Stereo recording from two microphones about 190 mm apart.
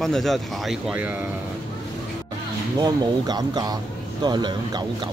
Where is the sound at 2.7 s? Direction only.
20° right (ahead or behind).